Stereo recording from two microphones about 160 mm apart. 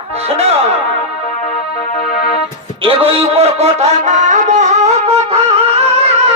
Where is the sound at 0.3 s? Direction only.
40° right (ahead or behind).